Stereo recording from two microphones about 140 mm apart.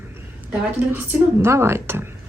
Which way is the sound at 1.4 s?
20° right (ahead or behind).